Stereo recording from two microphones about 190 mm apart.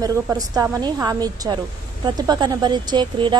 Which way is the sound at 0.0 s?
20° right (ahead or behind).